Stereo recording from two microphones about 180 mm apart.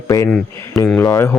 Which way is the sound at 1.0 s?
15° left (ahead or behind).